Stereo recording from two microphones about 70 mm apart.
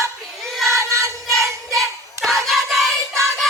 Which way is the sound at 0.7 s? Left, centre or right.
Right.